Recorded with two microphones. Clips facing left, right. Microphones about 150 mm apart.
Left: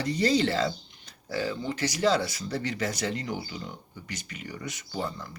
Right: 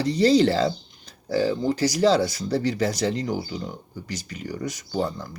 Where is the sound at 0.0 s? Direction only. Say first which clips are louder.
Right 7 dB; 35° right (ahead or behind).